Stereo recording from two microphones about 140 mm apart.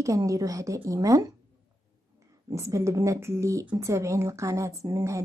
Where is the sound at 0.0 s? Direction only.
25° right (ahead or behind).